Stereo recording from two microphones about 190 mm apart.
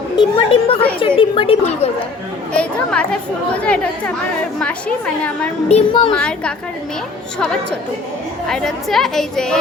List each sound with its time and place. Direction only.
0.2 s speech: 25° left (ahead or behind)
2.5 s speech: 5° left (ahead or behind)
5.6 s speech: 30° left (ahead or behind)
6.1 s speech: 5° left (ahead or behind)